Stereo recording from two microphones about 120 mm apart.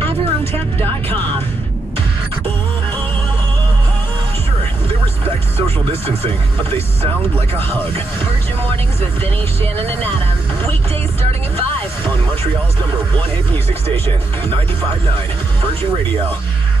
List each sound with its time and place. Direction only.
0.0 s a sound: 20° left (ahead or behind)
1.1 s music: 40° right (ahead or behind)
5.9 s speech: 50° right (ahead or behind)